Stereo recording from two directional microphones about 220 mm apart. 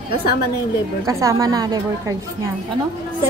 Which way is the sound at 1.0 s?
15° right (ahead or behind).